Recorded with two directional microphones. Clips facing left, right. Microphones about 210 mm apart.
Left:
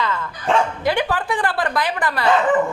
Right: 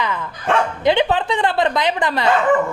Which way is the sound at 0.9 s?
20° right (ahead or behind).